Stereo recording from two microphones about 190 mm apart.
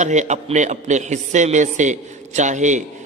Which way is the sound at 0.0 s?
40° right (ahead or behind).